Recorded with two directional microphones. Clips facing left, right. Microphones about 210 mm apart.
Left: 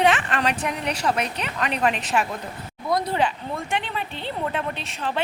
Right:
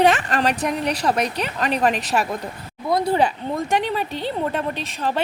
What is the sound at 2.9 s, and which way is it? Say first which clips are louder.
Speech: right 4 dB; 30° right (ahead or behind).